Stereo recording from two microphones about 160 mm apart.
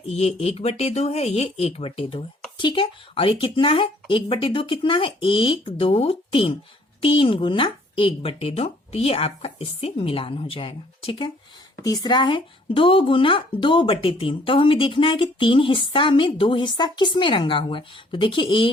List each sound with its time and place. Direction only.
0.0 s speech: 40° left (ahead or behind)